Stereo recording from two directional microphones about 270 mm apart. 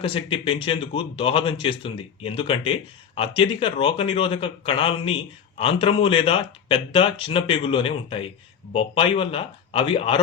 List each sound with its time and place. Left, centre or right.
0.0 s speech: centre